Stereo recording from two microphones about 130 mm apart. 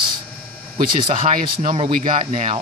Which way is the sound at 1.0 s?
50° right (ahead or behind).